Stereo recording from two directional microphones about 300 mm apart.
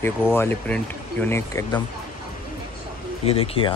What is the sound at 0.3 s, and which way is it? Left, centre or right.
Speech, centre.